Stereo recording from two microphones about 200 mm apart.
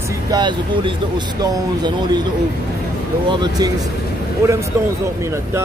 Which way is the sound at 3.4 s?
20° right (ahead or behind).